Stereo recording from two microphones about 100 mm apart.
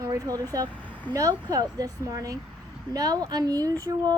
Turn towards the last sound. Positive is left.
turn(degrees=-35)  # may be behind; listen again after turning